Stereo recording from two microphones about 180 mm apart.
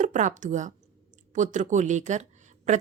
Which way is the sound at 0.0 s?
45° right (ahead or behind).